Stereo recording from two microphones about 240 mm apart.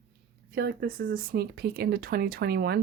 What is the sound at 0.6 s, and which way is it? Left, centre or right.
Speech, right.